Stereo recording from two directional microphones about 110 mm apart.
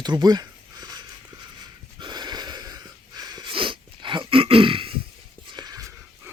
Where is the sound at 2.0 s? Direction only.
40° right (ahead or behind).